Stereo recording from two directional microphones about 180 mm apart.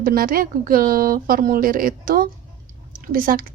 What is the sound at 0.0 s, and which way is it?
Speech, 55° right (ahead or behind).